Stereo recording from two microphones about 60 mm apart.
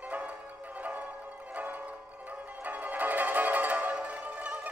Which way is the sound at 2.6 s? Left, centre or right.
Right.